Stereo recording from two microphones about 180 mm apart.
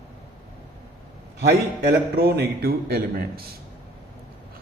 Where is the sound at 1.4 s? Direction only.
70° right (ahead or behind).